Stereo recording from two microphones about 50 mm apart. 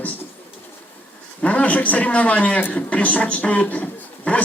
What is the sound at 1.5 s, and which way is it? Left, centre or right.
A man's voice, left.